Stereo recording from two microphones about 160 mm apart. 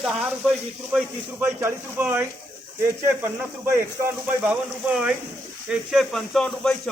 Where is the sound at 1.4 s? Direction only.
10° right (ahead or behind).